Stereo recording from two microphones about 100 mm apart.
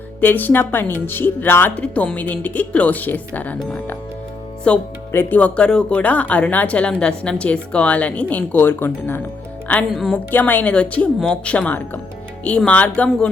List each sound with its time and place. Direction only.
0.2 s speech: 15° left (ahead or behind)
9.9 s a woman's voice: centre (ahead or behind)
10.3 s speech: 20° left (ahead or behind)